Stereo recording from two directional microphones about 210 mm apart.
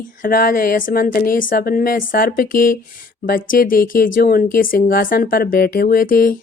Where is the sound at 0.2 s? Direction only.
45° left (ahead or behind).